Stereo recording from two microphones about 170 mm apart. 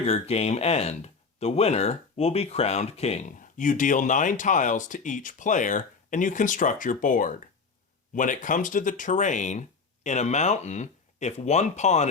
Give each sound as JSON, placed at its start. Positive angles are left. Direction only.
{"t": 0.0, "sound": "speech", "side_deg": 40}